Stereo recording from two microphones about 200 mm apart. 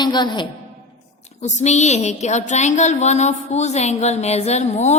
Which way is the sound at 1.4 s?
35° left (ahead or behind).